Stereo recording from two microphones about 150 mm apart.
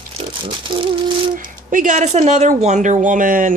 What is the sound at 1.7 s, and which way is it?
A woman's voice, 55° right (ahead or behind).